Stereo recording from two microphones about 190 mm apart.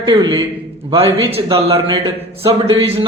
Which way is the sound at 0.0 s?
20° right (ahead or behind).